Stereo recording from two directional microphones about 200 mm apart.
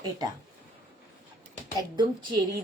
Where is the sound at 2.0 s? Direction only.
20° right (ahead or behind).